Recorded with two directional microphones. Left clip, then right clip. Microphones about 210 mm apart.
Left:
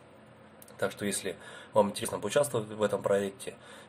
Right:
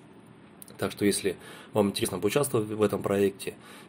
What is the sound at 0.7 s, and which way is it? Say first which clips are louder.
Speech: right 5 dB; 25° right (ahead or behind).